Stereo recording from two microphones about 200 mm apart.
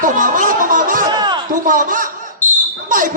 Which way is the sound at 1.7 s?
40° right (ahead or behind).